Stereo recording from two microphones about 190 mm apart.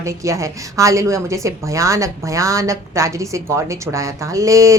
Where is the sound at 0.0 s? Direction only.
15° right (ahead or behind).